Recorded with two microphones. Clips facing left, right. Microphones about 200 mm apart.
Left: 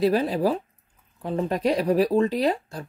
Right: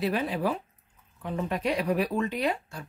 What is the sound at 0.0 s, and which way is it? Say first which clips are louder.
Speech: left 6 dB; 35° left (ahead or behind).